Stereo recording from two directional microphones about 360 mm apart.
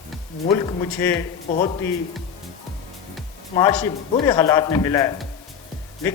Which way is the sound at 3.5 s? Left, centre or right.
Centre.